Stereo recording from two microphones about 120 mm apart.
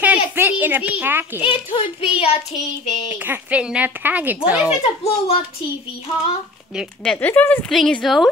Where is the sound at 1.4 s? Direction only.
45° left (ahead or behind).